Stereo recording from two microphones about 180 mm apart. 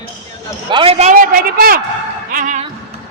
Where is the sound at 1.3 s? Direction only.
55° right (ahead or behind).